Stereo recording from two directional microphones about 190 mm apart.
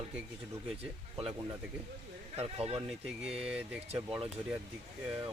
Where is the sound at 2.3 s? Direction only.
30° right (ahead or behind).